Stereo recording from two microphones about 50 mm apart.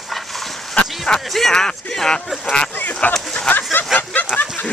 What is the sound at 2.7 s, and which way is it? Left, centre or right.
Speech, left.